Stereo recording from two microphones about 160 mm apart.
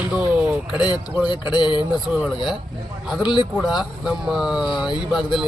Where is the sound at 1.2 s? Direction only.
30° left (ahead or behind).